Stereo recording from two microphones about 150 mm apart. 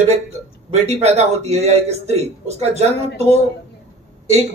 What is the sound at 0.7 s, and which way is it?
A man's voice, 45° right (ahead or behind).